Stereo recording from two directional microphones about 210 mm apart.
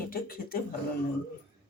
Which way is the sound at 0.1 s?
45° left (ahead or behind).